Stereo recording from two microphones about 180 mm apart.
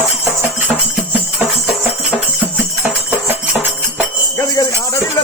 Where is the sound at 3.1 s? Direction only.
10° right (ahead or behind).